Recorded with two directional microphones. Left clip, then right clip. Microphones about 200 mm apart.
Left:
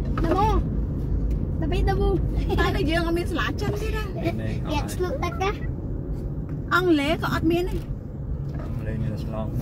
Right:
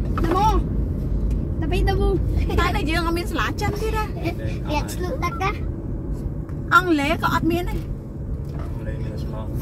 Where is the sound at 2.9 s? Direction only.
25° right (ahead or behind).